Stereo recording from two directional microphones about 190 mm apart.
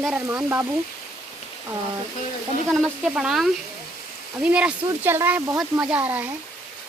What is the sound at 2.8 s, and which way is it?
Speech, 5° right (ahead or behind).